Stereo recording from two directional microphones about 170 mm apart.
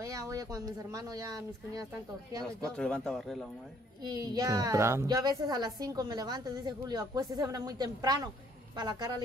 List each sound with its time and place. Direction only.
0.0 s a woman's voice: 20° right (ahead or behind)
2.4 s speech: 5° left (ahead or behind)
4.0 s a woman's voice: 25° right (ahead or behind)